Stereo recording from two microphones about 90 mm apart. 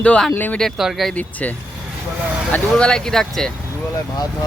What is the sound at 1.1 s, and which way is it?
Speech, 15° left (ahead or behind).